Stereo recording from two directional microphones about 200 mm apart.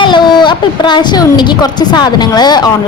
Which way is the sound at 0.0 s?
20° left (ahead or behind).